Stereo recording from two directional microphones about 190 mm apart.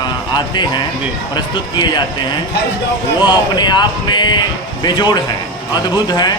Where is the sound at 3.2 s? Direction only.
20° left (ahead or behind).